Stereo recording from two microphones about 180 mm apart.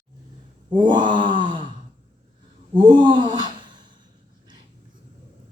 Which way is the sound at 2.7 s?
25° right (ahead or behind).